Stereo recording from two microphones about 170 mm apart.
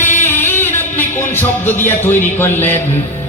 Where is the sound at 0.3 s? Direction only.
15° left (ahead or behind).